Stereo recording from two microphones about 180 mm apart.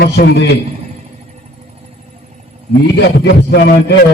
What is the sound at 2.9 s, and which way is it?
Speech, 70° left (ahead or behind).